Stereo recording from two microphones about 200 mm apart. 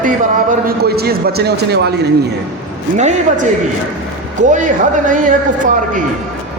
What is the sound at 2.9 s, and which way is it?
A man's voice, 35° right (ahead or behind).